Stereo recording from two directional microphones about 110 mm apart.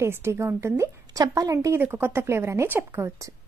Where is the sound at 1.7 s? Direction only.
20° right (ahead or behind).